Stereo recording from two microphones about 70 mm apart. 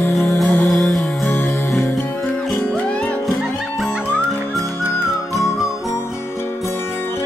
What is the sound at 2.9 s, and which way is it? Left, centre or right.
Music, centre.